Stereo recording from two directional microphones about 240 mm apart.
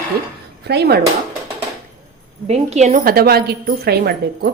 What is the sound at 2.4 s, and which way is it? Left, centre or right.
A woman's voice, right.